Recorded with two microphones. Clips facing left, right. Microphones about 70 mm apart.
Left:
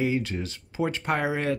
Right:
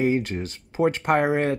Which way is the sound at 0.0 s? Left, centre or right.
Right.